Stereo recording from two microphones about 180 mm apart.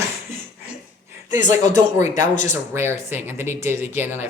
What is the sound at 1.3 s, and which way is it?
Speech, 20° right (ahead or behind).